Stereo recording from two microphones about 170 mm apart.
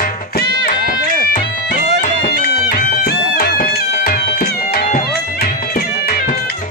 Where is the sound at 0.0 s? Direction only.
60° left (ahead or behind).